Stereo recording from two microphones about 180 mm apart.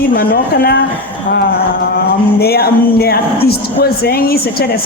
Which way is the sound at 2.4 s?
60° left (ahead or behind).